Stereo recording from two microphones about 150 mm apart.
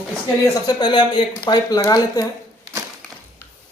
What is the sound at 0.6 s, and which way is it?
Speech, 30° left (ahead or behind).